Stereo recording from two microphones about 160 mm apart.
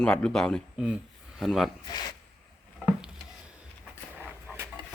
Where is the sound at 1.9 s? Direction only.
25° left (ahead or behind).